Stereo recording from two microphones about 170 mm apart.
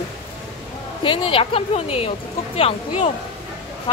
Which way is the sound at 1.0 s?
30° left (ahead or behind).